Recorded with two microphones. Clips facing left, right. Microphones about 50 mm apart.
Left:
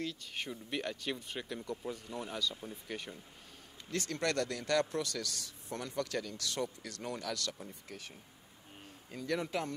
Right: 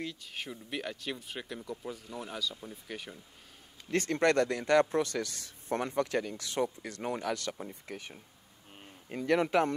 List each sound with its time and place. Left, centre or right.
0.0 s speech: centre
3.9 s speech: right
9.1 s a man's voice: right